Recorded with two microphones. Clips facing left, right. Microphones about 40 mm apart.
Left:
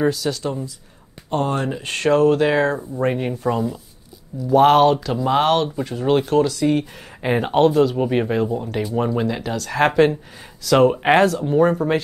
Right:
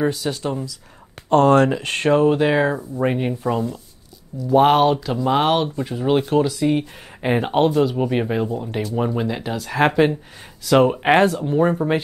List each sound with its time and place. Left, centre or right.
0.1 s speech: right
1.3 s speech: right
2.1 s speech: centre
4.5 s speech: centre